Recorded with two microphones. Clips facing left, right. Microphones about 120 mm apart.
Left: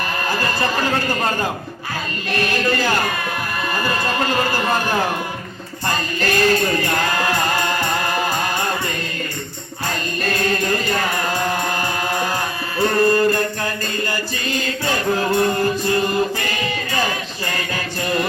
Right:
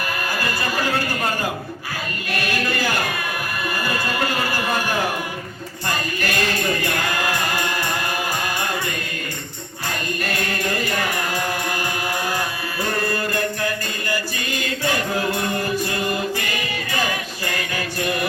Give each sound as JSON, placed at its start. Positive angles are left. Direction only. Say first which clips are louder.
{"t": 0.4, "sound": "a sound", "louder": "left 2 dB", "side_deg": 35}
{"t": 2.3, "sound": "a sound", "louder": "left 4 dB", "side_deg": 30}
{"t": 3.8, "sound": "run", "louder": "left 3 dB", "side_deg": 30}
{"t": 5.9, "sound": "music", "louder": "left 3 dB", "side_deg": 35}
{"t": 10.2, "sound": "music", "louder": "left 7 dB", "side_deg": 30}
{"t": 14.5, "sound": "music", "louder": "left 1 dB", "side_deg": 30}